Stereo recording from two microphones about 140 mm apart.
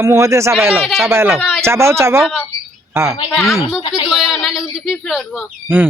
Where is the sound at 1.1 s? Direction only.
15° right (ahead or behind).